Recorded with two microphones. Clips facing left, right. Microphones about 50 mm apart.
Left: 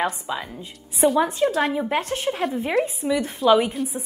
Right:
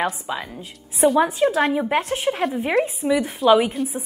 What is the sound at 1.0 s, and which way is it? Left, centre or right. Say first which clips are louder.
A woman's voice: right 2 dB; centre.